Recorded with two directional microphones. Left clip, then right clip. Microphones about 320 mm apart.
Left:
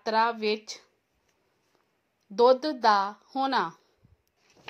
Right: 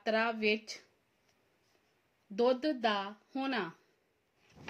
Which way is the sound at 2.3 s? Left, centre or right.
Left.